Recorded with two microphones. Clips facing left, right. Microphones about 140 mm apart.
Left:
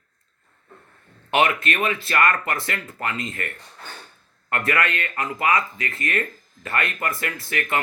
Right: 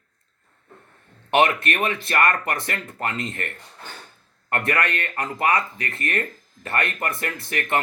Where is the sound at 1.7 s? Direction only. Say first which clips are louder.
Even; 25° right (ahead or behind).